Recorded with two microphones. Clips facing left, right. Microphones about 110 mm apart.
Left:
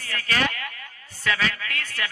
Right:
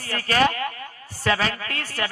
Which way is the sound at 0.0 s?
35° right (ahead or behind).